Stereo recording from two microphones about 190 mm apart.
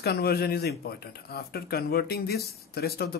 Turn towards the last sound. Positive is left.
turn(degrees=55)  # may be behind; listen again after turning